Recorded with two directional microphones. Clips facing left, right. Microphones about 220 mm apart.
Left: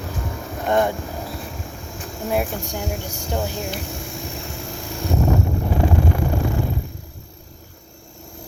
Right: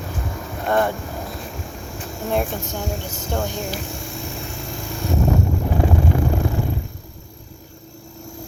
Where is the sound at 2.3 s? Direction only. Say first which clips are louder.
Even; 10° left (ahead or behind).